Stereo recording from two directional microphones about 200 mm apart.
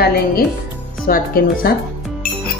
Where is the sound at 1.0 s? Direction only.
45° left (ahead or behind).